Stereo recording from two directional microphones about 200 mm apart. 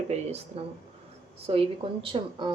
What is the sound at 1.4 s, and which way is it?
A woman's voice, 30° right (ahead or behind).